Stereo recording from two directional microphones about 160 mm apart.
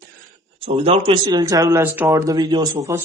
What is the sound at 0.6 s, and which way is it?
Speech, 40° right (ahead or behind).